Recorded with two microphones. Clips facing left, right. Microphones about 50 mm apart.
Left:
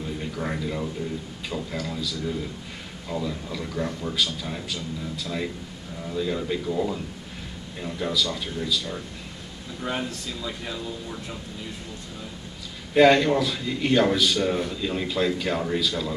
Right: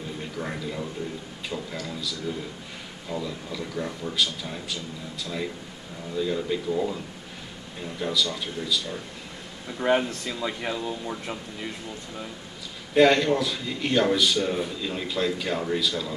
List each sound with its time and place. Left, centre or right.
0.4 s a man's voice: centre
8.0 s a man's voice: centre
9.8 s speech: right
12.9 s a man's voice: centre